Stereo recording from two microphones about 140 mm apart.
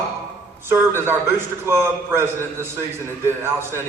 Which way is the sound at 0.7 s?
15° right (ahead or behind).